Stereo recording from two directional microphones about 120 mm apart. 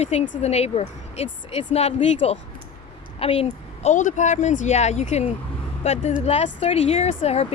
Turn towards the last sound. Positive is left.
turn(degrees=60)  # may be behind; listen again after turning